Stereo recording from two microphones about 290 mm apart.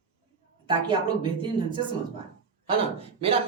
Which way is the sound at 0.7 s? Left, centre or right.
Centre.